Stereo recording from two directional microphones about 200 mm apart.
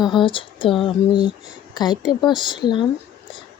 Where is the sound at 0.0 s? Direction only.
25° left (ahead or behind).